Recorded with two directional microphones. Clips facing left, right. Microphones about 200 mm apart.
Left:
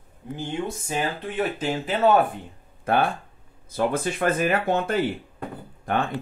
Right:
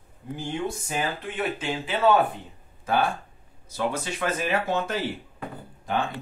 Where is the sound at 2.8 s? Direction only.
55° left (ahead or behind).